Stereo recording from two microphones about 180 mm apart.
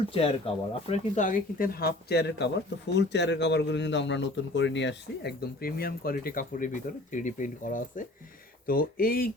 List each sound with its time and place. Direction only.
0.1 s speech: 30° left (ahead or behind); by 9.3 s 55° left (ahead or behind)